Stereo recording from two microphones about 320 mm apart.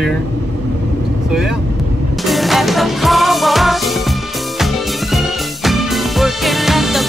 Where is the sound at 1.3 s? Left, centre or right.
Centre.